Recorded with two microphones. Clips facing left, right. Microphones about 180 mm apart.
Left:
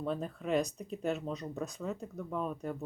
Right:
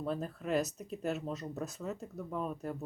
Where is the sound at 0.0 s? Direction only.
5° right (ahead or behind).